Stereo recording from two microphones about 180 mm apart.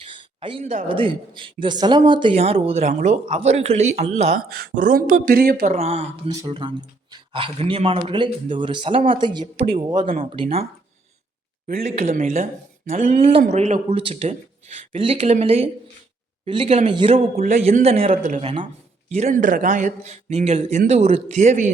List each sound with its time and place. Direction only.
0.0 s a sound: 30° right (ahead or behind)
0.9 s speech: 30° right (ahead or behind)
4.4 s speech: 55° right (ahead or behind)
5.7 s speech: 35° right (ahead or behind)
11.7 s speech: 40° right (ahead or behind)
17.4 s speech: 40° right (ahead or behind)